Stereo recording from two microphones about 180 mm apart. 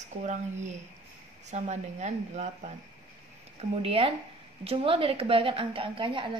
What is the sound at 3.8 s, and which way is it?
A woman's voice, 30° right (ahead or behind).